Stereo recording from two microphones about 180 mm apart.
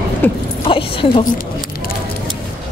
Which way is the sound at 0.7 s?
30° left (ahead or behind).